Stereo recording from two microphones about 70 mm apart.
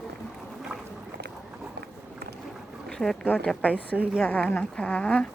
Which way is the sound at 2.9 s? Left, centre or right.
Centre.